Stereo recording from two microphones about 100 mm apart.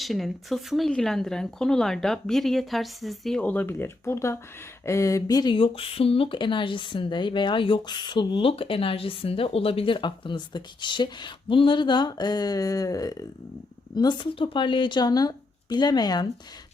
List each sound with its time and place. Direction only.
0.0 s speech: centre (ahead or behind)
3.4 s speech: 15° left (ahead or behind); by 5.5 s 40° left (ahead or behind)
5.5 s speech: 65° left (ahead or behind); by 16.2 s 45° left (ahead or behind)